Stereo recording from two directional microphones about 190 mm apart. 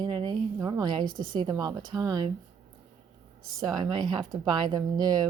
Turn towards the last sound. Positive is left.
turn(degrees=-20)  # may be behind; listen again after turning